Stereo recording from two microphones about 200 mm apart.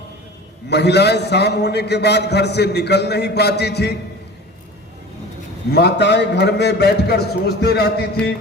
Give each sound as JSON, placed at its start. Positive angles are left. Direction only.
{"t": 0.7, "sound": "a man's voice", "side_deg": 55}
{"t": 5.7, "sound": "a man's voice", "side_deg": 60}